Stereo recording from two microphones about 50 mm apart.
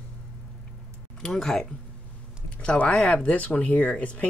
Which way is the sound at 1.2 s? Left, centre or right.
Centre.